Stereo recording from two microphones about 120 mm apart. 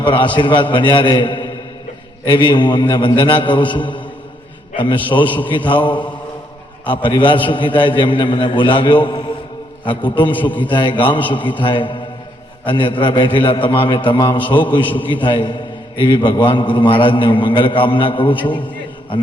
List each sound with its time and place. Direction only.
0.0 s a man's voice: 40° left (ahead or behind)